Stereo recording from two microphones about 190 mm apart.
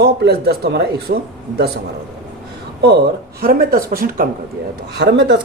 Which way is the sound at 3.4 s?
50° right (ahead or behind).